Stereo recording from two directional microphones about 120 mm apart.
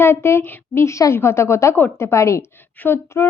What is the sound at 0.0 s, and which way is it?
A woman's voice, 20° left (ahead or behind).